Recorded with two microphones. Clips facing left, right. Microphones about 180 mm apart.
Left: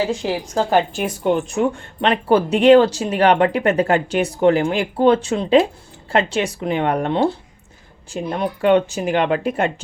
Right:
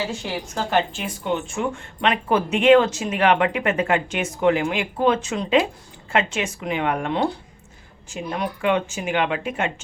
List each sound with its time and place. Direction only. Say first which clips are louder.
0.1 s speech: left 7 dB; 40° left (ahead or behind)